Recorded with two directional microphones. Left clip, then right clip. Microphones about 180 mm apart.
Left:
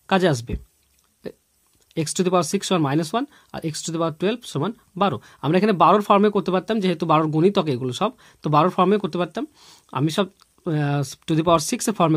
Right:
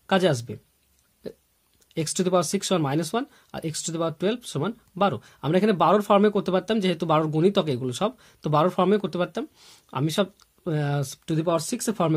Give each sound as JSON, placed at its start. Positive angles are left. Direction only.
{"t": 0.0, "sound": "speech", "side_deg": 20}
{"t": 1.2, "sound": "hiccup", "side_deg": 30}
{"t": 2.0, "sound": "speech", "side_deg": 25}